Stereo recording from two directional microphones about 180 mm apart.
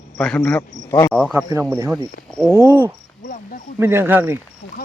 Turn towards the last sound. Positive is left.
turn(degrees=-10)  # may be behind; listen again after turning